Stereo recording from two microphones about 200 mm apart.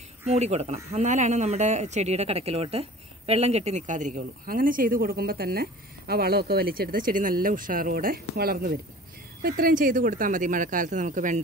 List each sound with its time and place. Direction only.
0.3 s speech: 35° right (ahead or behind)